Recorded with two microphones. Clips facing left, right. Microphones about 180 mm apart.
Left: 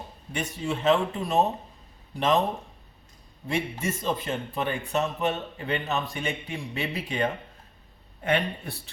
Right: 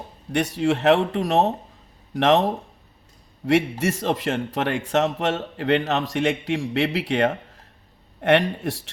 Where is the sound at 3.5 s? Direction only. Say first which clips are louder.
Right 9 dB; 90° right.